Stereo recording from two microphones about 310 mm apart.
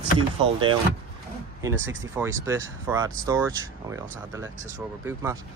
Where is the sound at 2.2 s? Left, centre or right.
Centre.